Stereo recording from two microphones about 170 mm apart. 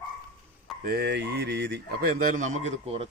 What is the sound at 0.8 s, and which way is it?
Speech, 65° right (ahead or behind).